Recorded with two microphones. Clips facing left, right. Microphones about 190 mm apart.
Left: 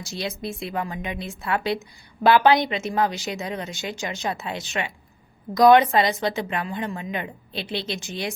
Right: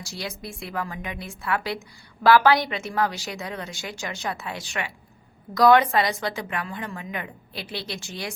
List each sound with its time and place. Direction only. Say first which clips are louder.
0.0 s a woman's voice: left 5 dB; 20° left (ahead or behind)